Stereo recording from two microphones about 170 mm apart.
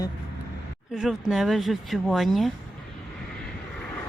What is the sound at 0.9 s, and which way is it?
Speech, centre (ahead or behind).